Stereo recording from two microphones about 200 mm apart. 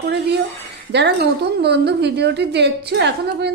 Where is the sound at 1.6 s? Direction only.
55° right (ahead or behind).